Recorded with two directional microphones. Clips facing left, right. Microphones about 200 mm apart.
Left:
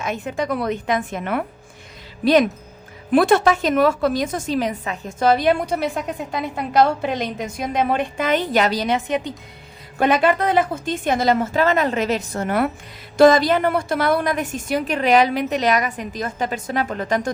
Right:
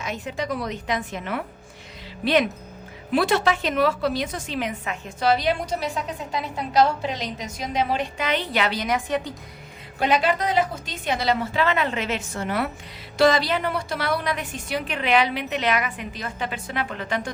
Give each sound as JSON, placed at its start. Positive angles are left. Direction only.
{"t": 0.0, "sound": "a woman's voice", "side_deg": 50}
{"t": 3.1, "sound": "a woman's voice", "side_deg": 50}
{"t": 9.0, "sound": "a woman's voice", "side_deg": 20}
{"t": 10.0, "sound": "a woman's voice", "side_deg": 50}